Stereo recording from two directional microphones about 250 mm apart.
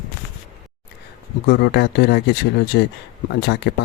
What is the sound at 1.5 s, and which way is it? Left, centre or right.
Speech, left.